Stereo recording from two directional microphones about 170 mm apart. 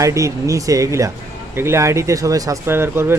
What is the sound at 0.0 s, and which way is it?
Speech, 20° right (ahead or behind).